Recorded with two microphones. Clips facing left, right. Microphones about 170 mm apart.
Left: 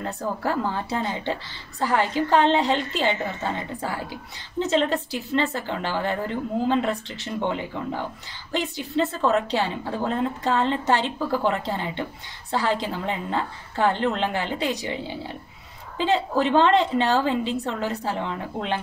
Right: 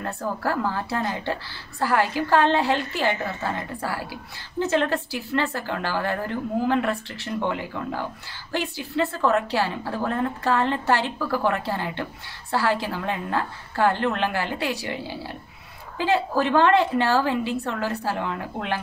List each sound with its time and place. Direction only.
0.0 s a woman's voice: 20° left (ahead or behind)